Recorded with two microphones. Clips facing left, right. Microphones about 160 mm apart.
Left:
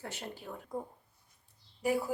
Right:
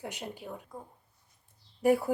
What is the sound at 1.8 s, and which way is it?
Speech, 55° right (ahead or behind).